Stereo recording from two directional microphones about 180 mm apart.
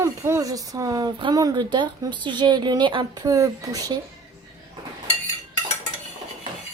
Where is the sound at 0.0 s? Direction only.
15° right (ahead or behind).